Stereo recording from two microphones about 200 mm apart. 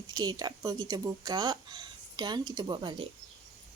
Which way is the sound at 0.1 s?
20° right (ahead or behind).